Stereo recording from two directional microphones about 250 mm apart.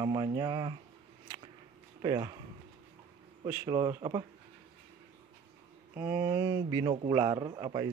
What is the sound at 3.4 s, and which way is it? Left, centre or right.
Speech, centre.